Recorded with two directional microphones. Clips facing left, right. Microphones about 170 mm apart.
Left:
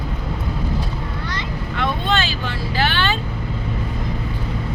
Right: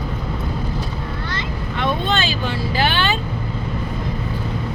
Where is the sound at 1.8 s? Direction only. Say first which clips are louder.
Right 1 dB; 20° right (ahead or behind).